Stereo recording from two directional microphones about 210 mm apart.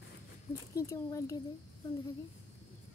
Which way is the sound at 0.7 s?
15° left (ahead or behind).